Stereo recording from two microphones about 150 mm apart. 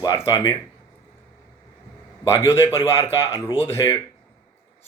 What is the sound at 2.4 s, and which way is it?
Speech, 15° left (ahead or behind).